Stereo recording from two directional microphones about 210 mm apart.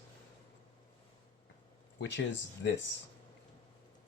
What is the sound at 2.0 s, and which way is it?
Speech, 60° left (ahead or behind).